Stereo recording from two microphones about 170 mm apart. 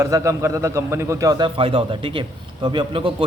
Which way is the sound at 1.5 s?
30° right (ahead or behind).